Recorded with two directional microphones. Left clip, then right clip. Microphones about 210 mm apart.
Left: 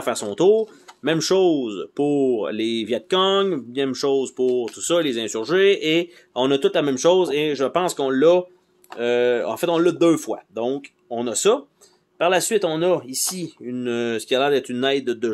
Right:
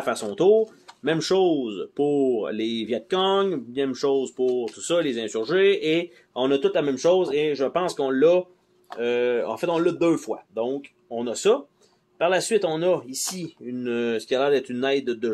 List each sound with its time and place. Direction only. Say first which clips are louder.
0.0 s speech: left 2 dB; 20° left (ahead or behind)